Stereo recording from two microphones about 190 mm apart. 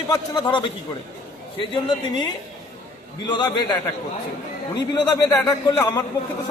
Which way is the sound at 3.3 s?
20° left (ahead or behind).